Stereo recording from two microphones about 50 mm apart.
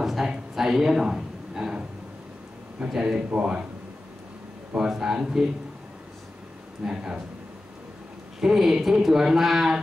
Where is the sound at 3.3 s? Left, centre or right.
Right.